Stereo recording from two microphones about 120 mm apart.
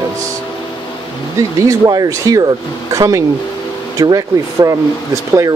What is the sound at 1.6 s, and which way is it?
Speech, 30° right (ahead or behind).